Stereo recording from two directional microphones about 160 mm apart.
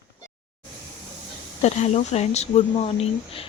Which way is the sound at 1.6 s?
45° left (ahead or behind).